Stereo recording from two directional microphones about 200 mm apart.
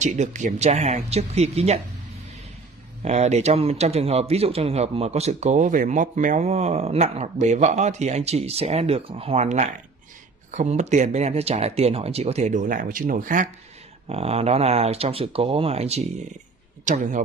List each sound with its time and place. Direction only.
0.0 s speech: 35° right (ahead or behind)
3.0 s speech: 35° right (ahead or behind)
14.0 s speech: 30° right (ahead or behind)